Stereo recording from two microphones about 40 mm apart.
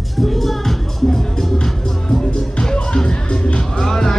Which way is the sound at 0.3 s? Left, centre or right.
Centre.